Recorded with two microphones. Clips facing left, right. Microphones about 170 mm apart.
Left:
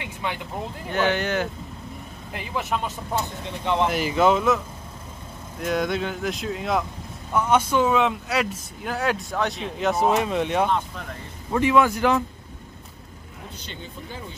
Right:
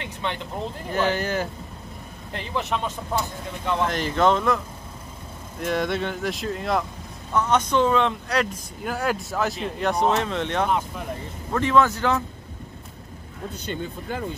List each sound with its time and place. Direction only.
0.0 s vehicle: 10° left (ahead or behind)
0.8 s speech: centre (ahead or behind)
3.2 s speech: 20° left (ahead or behind)
3.8 s speech: 5° left (ahead or behind)
5.6 s speech: centre (ahead or behind)
13.7 s speech: 55° right (ahead or behind)